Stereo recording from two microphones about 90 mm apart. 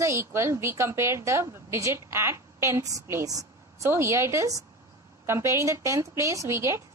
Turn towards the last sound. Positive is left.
turn(degrees=-30)  # may be behind; listen again after turning